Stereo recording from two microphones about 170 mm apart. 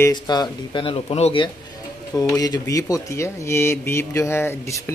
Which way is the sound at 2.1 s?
20° left (ahead or behind).